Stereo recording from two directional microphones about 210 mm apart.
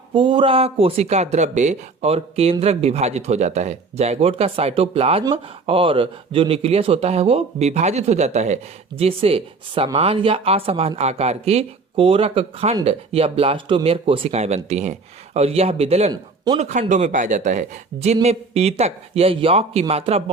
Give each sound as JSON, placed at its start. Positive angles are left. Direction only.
{"t": 0.1, "sound": "speech", "side_deg": -25}